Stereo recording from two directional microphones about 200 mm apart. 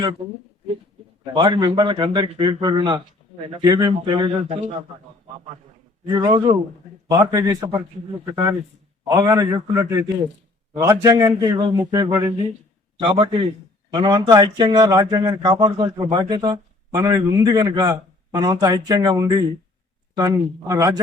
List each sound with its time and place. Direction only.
1.2 s speech: 25° right (ahead or behind)
6.1 s a man's voice: 20° right (ahead or behind)